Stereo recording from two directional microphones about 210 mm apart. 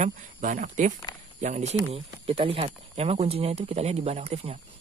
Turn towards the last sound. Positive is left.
turn(degrees=-30)  # may be behind; listen again after turning